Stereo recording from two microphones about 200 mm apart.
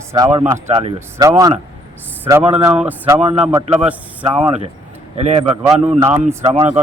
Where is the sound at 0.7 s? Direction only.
30° right (ahead or behind).